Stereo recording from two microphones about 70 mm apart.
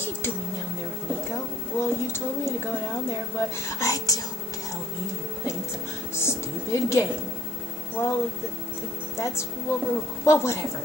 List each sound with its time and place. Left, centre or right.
1.3 s a sound: left
2.7 s a woman's voice: left
3.8 s speech: left
6.1 s a woman's voice: left
7.9 s music: left
9.1 s a woman's voice: left